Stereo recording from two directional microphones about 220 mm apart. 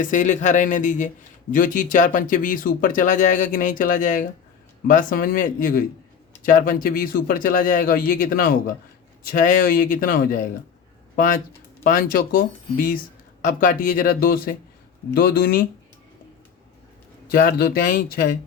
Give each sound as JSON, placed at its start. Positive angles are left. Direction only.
{"t": 0.0, "sound": "a man's voice", "side_deg": 35}
{"t": 11.8, "sound": "a man's voice", "side_deg": 40}
{"t": 17.2, "sound": "a man's voice", "side_deg": 40}